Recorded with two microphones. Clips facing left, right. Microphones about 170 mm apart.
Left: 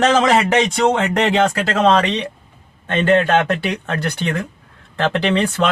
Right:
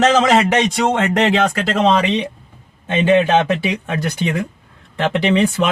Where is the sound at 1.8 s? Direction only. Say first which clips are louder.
Even; 10° right (ahead or behind).